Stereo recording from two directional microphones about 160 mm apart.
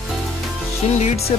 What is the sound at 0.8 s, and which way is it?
Speech, 40° left (ahead or behind).